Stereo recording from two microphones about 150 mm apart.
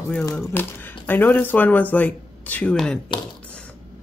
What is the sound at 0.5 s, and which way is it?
Speech, 15° left (ahead or behind).